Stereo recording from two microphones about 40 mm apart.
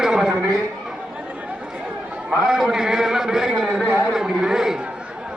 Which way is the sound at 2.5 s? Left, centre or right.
Centre.